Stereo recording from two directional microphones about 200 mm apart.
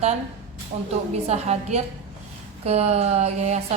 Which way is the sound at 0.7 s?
35° right (ahead or behind).